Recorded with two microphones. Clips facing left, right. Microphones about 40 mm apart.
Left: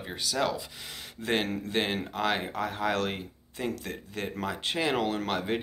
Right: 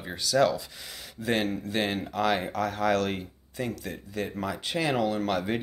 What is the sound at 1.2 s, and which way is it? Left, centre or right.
Speech, left.